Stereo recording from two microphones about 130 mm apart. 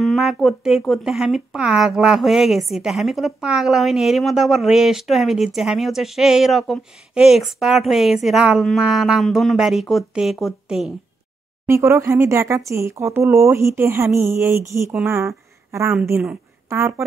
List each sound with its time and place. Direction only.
0.0 s speech: centre (ahead or behind)
11.6 s speech: 20° right (ahead or behind)